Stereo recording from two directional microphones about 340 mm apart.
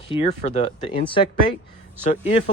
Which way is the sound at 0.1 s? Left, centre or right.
Centre.